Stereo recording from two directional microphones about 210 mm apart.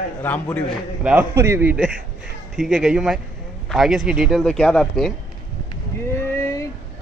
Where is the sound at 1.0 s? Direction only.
10° right (ahead or behind).